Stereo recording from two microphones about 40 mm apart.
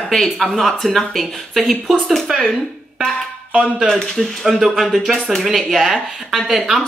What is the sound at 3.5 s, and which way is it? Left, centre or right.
Speech, right.